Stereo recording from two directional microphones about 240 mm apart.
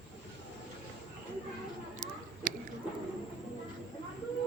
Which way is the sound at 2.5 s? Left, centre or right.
Right.